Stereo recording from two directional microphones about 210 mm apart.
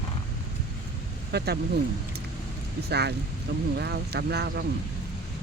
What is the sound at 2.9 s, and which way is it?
Speech, 50° right (ahead or behind).